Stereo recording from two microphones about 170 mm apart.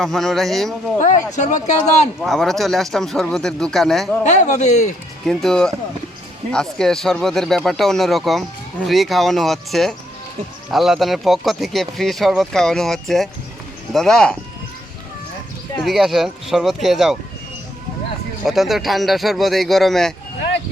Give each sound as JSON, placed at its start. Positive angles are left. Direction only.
{"t": 0.0, "sound": "speech", "side_deg": 0}
{"t": 0.9, "sound": "speech", "side_deg": 45}
{"t": 2.2, "sound": "speech", "side_deg": 0}
{"t": 4.2, "sound": "speech", "side_deg": 45}
{"t": 5.2, "sound": "speech", "side_deg": 0}
{"t": 15.8, "sound": "speech", "side_deg": 0}
{"t": 18.4, "sound": "speech", "side_deg": 0}